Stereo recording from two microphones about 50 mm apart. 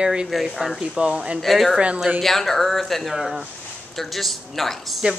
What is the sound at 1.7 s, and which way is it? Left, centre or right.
Speech, right.